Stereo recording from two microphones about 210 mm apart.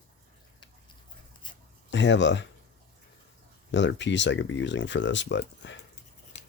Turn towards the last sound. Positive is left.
turn(degrees=60)  # may be behind; listen again after turning